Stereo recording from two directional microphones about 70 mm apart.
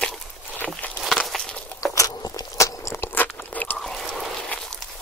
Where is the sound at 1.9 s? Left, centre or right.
Left.